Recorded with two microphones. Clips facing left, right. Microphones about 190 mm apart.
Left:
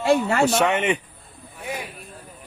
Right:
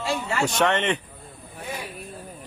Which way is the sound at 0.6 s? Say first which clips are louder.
Left 1 dB; 10° left (ahead or behind).